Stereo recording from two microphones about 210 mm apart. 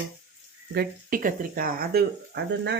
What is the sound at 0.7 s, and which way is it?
Speech, 45° right (ahead or behind).